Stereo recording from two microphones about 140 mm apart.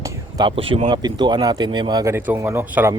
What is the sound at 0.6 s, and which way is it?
Speech, 40° right (ahead or behind).